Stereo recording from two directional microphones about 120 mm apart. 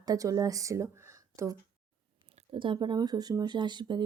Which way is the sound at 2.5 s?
45° right (ahead or behind).